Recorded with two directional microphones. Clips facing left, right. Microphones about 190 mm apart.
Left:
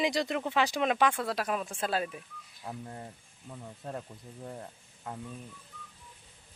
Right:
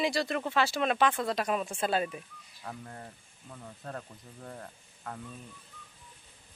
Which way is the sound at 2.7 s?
15° left (ahead or behind).